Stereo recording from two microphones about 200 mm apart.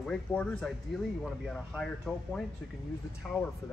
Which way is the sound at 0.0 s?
5° left (ahead or behind).